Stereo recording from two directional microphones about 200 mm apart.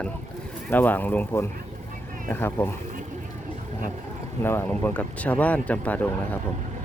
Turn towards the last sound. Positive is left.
turn(degrees=10)  # may be behind; listen again after turning